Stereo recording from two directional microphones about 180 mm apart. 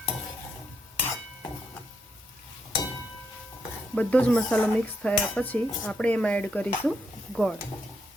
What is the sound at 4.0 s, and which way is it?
Speech, 5° left (ahead or behind).